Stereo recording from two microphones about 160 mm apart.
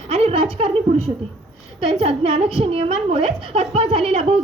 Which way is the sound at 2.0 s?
40° right (ahead or behind).